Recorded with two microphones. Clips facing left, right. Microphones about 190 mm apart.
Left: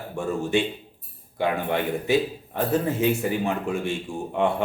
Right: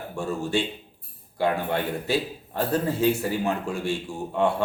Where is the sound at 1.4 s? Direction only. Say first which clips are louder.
Even; 20° left (ahead or behind).